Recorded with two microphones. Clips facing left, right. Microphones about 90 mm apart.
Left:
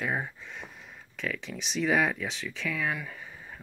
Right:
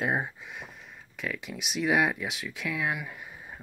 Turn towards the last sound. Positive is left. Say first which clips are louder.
# right 1 dB
turn(degrees=-15)  # may be behind; listen again after turning